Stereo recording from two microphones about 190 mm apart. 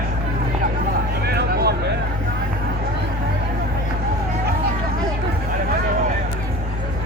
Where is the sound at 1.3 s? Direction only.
55° right (ahead or behind).